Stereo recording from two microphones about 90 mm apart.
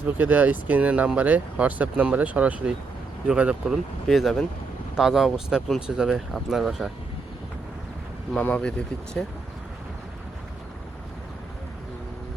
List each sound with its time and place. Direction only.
0.0 s speech: 20° right (ahead or behind)
4.1 s speech: centre (ahead or behind)
8.4 s speech: 15° left (ahead or behind)